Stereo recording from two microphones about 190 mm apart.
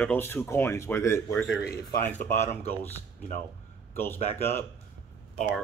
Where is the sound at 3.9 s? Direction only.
10° left (ahead or behind).